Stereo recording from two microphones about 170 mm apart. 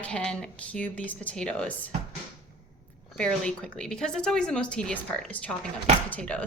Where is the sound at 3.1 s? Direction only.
5° left (ahead or behind).